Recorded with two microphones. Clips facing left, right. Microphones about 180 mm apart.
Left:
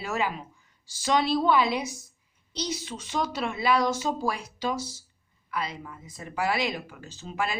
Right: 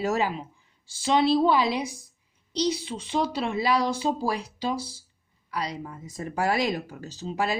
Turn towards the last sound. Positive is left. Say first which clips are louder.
# right 3 dB
turn(degrees=-35)  # may be behind; listen again after turning